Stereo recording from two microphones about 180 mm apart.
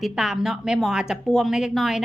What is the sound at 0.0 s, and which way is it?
Speech, 5° right (ahead or behind).